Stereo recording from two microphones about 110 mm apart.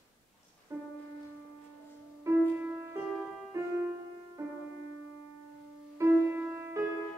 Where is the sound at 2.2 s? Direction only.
15° right (ahead or behind).